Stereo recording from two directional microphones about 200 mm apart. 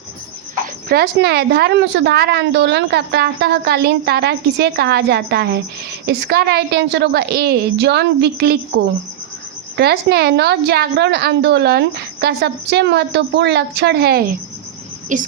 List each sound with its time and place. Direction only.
0.9 s a woman's voice: 50° right (ahead or behind)